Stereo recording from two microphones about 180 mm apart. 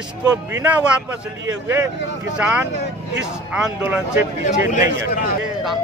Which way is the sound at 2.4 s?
10° right (ahead or behind).